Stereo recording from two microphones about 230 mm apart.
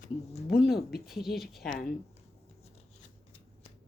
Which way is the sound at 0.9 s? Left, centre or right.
Centre.